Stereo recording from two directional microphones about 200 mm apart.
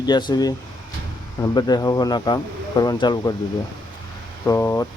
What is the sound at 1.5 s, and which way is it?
Speech, 20° left (ahead or behind).